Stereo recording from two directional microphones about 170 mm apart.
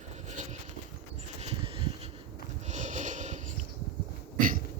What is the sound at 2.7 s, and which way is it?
Sniff, 45° right (ahead or behind).